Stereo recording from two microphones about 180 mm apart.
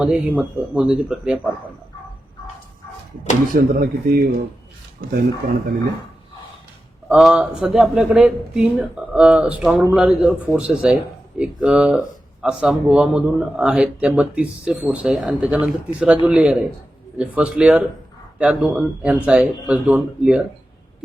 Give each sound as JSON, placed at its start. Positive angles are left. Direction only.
{"t": 0.0, "sound": "speech", "side_deg": -5}
{"t": 3.5, "sound": "speech", "side_deg": -55}
{"t": 7.1, "sound": "speech", "side_deg": -5}